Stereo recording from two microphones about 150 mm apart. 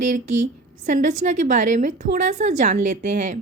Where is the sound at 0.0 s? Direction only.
55° right (ahead or behind).